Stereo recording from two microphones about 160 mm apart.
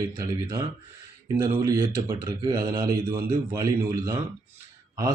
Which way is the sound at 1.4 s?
20° right (ahead or behind).